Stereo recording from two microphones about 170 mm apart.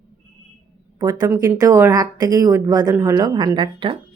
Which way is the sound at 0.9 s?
25° right (ahead or behind).